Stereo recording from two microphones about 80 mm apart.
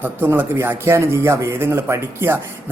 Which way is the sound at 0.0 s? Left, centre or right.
Right.